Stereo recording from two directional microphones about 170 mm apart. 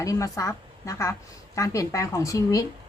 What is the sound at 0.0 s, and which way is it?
A woman's voice, 20° left (ahead or behind).